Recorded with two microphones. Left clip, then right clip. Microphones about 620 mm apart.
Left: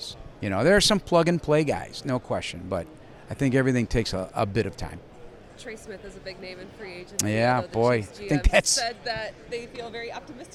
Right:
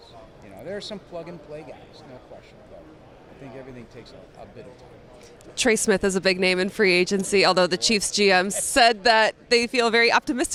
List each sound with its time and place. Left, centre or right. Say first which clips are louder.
0.0 s speech: left 10 dB; left
5.5 s speech: right 19 dB; right